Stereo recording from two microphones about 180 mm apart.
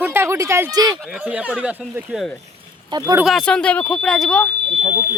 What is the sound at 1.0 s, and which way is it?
Speech, 5° right (ahead or behind).